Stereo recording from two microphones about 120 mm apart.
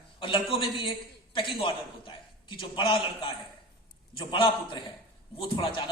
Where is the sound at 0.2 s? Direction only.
45° left (ahead or behind).